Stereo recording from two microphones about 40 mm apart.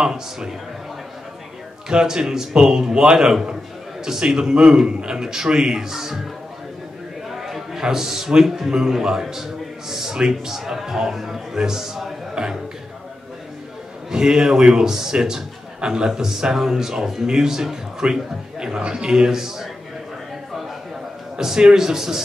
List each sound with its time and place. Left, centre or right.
0.0 s a man's voice: centre
1.9 s a man's voice: centre
7.2 s a sound: centre
7.8 s a man's voice: centre
14.1 s a man's voice: centre
21.4 s a man's voice: centre